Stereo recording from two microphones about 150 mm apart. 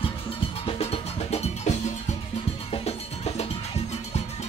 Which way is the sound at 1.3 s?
45° left (ahead or behind).